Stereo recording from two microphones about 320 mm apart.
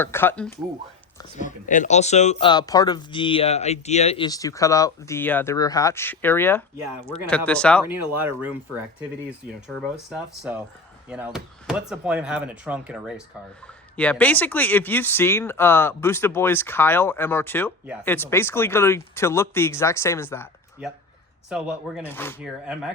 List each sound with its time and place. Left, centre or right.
0.0 s speech: centre
1.2 s speech: left; by 8.5 s centre
9.6 s speech: centre
22.4 s speech: centre